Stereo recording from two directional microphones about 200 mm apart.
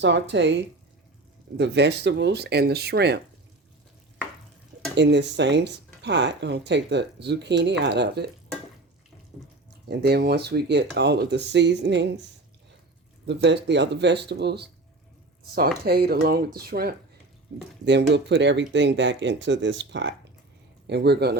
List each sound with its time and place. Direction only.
0.0 s speech: 60° right (ahead or behind)
4.9 s speech: 60° right (ahead or behind)
9.9 s speech: 55° right (ahead or behind)
13.2 s speech: 60° right (ahead or behind)
15.8 s speech: 50° right (ahead or behind)
17.8 s speech: 60° right (ahead or behind)